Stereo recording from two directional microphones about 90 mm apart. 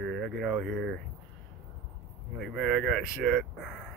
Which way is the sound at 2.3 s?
Centre (ahead or behind).